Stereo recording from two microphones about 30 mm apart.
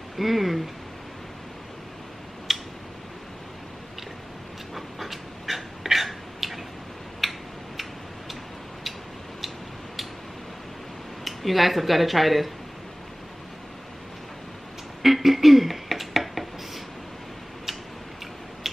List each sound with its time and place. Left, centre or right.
0.2 s speech: centre
2.5 s tick-tock: centre
4.7 s pant: centre
7.2 s a sound: centre
11.2 s speech: centre
15.0 s a sound: centre